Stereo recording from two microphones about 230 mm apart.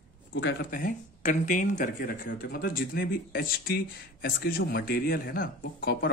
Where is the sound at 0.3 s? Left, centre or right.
Left.